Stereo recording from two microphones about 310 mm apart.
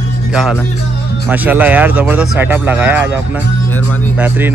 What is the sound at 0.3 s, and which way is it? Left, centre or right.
Speech, centre.